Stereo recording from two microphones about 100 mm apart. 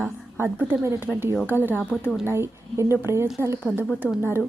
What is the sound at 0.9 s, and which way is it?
A woman's voice, 20° right (ahead or behind).